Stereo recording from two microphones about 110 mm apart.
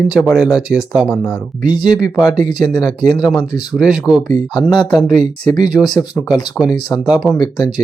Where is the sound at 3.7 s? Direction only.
5° right (ahead or behind).